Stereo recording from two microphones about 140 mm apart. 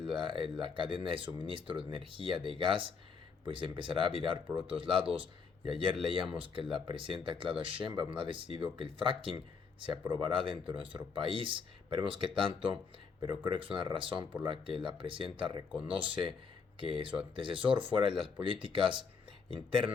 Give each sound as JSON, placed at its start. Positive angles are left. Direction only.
{"t": 0.1, "sound": "speech", "side_deg": -35}